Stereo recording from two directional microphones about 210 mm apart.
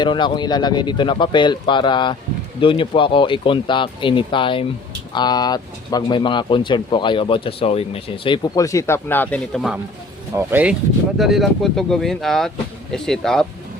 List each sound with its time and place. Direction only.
0.0 s speech: 20° left (ahead or behind); by 13.5 s centre (ahead or behind)